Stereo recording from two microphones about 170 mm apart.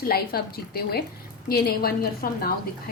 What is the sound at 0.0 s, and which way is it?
Speech, 60° left (ahead or behind).